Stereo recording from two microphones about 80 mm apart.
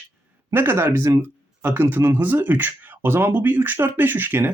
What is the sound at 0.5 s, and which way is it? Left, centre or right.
Speech, right.